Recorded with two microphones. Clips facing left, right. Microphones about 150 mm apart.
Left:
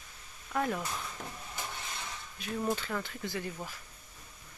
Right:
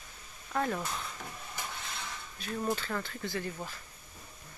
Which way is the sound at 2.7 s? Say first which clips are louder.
Even; 10° left (ahead or behind).